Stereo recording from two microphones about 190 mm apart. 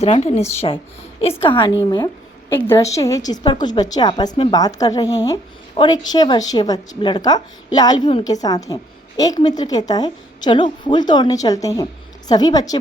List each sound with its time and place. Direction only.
0.0 s a woman's voice: 35° left (ahead or behind)